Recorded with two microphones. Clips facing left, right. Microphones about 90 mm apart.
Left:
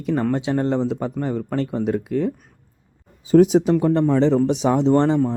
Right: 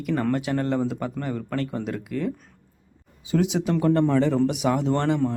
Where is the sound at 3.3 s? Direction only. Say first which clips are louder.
Left 10 dB; 40° left (ahead or behind).